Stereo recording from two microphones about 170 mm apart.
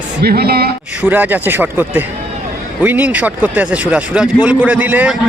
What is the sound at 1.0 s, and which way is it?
Speech, 10° right (ahead or behind).